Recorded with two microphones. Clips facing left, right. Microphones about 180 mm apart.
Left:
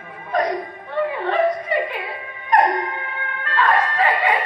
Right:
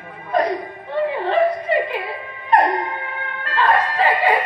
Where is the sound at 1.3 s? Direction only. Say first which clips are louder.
Right 2 dB; 30° right (ahead or behind).